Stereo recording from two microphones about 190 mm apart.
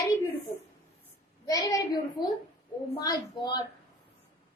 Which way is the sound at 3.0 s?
20° left (ahead or behind).